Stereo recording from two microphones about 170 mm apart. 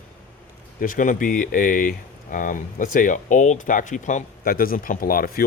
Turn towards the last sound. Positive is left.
turn(degrees=60)  # may be behind; listen again after turning